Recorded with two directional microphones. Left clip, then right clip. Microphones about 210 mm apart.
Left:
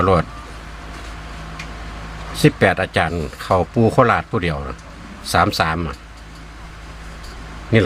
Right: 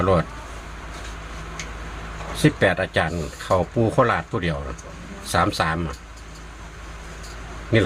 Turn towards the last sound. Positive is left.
turn(degrees=30)  # may be behind; listen again after turning